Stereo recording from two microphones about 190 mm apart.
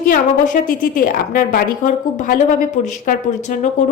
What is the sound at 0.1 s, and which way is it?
A woman's voice, 45° left (ahead or behind).